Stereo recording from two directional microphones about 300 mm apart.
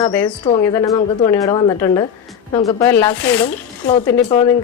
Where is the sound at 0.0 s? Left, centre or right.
Centre.